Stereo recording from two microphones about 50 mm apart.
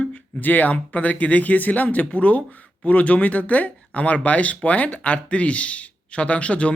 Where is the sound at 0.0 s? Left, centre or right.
Left.